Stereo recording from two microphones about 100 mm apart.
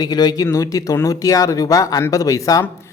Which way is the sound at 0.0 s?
40° left (ahead or behind).